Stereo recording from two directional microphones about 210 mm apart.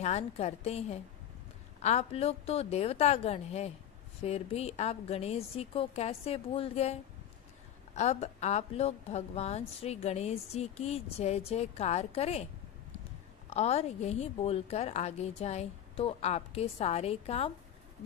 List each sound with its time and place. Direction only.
0.0 s a woman's voice: 30° left (ahead or behind)
13.5 s a woman's voice: 30° left (ahead or behind)